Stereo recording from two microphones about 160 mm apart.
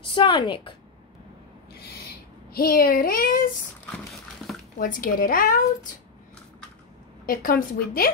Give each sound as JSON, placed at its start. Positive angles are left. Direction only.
{"t": 0.0, "sound": "speech", "side_deg": 30}
{"t": 1.7, "sound": "owl", "side_deg": 90}
{"t": 2.5, "sound": "a child's voice", "side_deg": 70}
{"t": 4.7, "sound": "a woman's voice", "side_deg": 60}
{"t": 7.2, "sound": "a woman's voice", "side_deg": 65}